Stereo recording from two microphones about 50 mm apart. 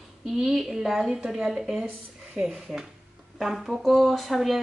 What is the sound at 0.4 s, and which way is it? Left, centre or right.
Speech, centre.